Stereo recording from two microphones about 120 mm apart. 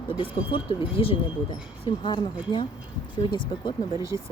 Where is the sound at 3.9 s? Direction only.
25° right (ahead or behind).